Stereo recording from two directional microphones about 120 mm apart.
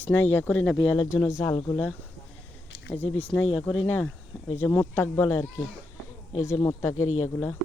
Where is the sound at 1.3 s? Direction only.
25° left (ahead or behind).